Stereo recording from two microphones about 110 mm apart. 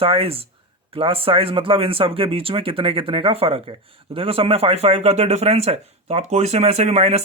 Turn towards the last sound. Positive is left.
turn(degrees=-75)  # may be behind; listen again after turning